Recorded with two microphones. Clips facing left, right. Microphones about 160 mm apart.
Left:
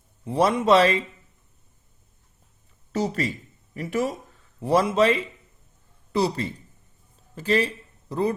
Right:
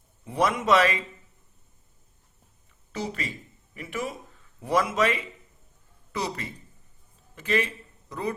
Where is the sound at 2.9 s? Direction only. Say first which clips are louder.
Left 7 dB; 40° left (ahead or behind).